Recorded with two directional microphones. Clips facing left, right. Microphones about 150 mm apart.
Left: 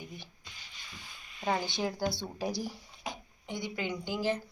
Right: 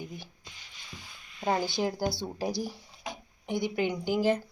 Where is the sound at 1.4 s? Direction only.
20° right (ahead or behind).